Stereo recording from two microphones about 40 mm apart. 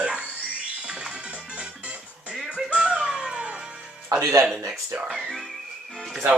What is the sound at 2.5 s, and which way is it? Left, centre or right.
Music, right.